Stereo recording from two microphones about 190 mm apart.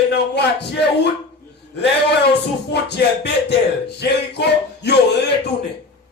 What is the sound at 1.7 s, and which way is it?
Speech, 60° left (ahead or behind).